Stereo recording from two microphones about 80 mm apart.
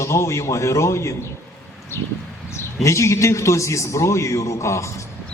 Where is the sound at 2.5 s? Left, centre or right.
Left.